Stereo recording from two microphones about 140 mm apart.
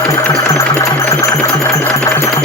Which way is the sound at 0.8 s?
20° left (ahead or behind).